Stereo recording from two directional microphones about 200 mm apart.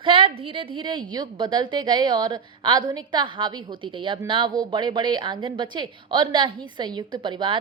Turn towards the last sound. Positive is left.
turn(degrees=-25)  # may be behind; listen again after turning